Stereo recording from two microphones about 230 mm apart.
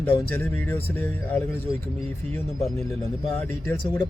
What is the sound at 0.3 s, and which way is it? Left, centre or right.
Speech, centre.